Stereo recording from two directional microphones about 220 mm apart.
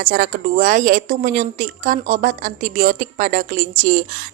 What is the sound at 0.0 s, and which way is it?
A woman's voice, 45° right (ahead or behind).